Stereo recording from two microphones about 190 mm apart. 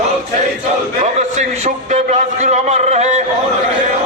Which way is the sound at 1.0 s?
35° right (ahead or behind).